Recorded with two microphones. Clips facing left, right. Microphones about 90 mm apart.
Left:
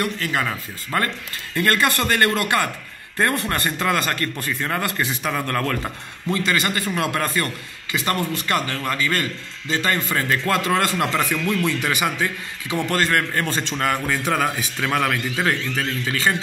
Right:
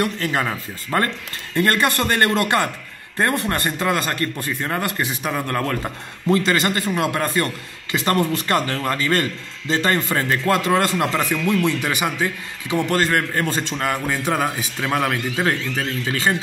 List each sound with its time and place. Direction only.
0.0 s speech: 30° right (ahead or behind)
6.2 s a man's voice: 35° right (ahead or behind)
7.0 s a man's voice: 20° right (ahead or behind)